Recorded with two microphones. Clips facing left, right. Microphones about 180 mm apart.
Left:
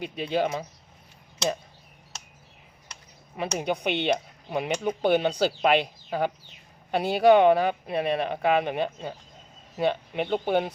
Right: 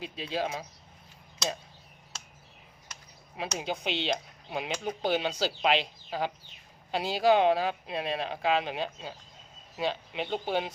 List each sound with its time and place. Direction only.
0.0 s speech: 60° left (ahead or behind)
3.3 s speech: 60° left (ahead or behind)